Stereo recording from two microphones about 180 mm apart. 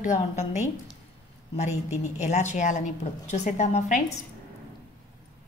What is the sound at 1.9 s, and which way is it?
A woman's voice, 40° left (ahead or behind).